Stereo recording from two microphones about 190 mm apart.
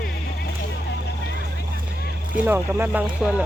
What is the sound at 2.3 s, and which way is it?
Speech, 10° right (ahead or behind).